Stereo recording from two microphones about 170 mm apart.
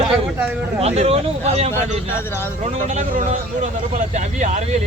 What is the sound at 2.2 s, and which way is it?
Speech, 15° left (ahead or behind).